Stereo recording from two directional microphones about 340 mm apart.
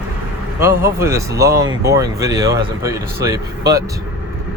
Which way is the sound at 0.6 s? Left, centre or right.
Centre.